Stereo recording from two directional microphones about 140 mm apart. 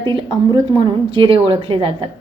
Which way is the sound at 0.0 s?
35° right (ahead or behind).